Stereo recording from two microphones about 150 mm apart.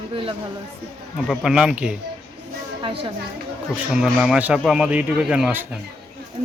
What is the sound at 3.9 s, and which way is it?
A man's voice, 5° right (ahead or behind).